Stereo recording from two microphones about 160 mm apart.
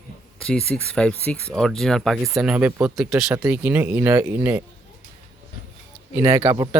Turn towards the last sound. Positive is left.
turn(degrees=-20)  # may be behind; listen again after turning